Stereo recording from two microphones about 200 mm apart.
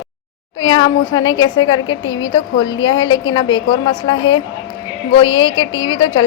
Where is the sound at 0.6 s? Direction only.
20° left (ahead or behind).